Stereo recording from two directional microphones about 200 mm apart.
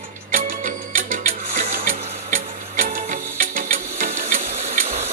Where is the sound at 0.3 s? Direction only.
40° right (ahead or behind).